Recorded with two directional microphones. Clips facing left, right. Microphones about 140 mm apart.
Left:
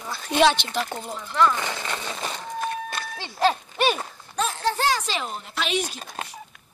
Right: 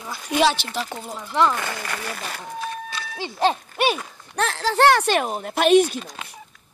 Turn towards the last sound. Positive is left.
turn(degrees=-55)  # may be behind; listen again after turning